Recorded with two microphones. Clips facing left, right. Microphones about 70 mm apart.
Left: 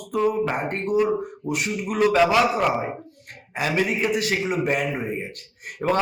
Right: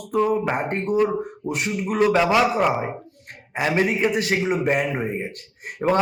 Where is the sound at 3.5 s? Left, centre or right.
Right.